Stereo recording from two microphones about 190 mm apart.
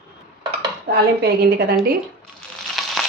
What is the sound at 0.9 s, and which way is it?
Dishes, 60° right (ahead or behind).